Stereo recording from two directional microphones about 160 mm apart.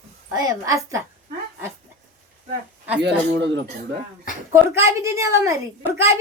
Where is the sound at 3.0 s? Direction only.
90° right.